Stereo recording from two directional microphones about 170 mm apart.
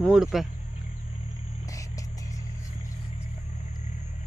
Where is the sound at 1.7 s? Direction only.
20° left (ahead or behind).